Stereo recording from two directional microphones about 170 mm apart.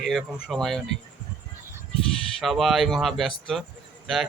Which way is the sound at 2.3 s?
Centre (ahead or behind).